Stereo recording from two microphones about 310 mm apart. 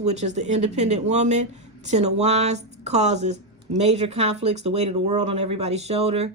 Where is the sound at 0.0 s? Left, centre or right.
Right.